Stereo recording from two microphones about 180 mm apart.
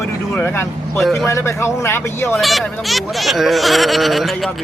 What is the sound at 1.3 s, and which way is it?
Speech, 15° left (ahead or behind).